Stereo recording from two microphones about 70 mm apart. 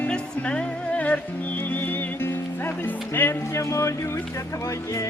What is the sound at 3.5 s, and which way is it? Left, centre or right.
Music, left.